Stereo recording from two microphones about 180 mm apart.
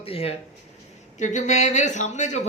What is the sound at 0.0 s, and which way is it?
Speech, 35° left (ahead or behind).